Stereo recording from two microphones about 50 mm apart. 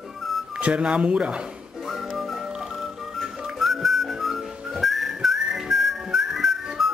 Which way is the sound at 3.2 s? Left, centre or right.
Centre.